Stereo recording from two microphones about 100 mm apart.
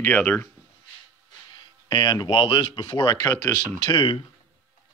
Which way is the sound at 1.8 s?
45° left (ahead or behind).